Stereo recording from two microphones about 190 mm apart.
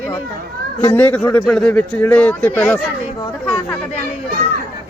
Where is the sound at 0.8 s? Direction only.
10° left (ahead or behind).